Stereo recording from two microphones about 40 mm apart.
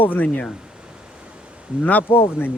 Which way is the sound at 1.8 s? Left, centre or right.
Left.